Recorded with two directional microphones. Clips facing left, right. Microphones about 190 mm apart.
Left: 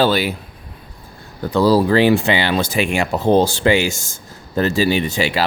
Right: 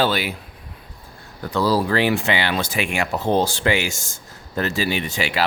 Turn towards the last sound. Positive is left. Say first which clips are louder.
# left 4 dB
turn(degrees=30)  # may be behind; listen again after turning